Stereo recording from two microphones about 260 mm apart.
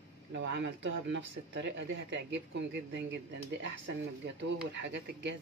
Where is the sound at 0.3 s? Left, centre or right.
Right.